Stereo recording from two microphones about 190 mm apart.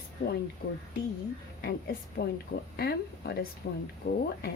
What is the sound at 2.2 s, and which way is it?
Speech, 50° left (ahead or behind).